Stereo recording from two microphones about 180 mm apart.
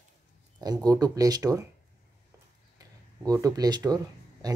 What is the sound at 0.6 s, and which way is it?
Speech, 20° right (ahead or behind).